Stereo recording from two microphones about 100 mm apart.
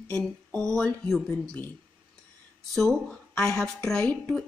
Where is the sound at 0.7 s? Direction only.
10° left (ahead or behind).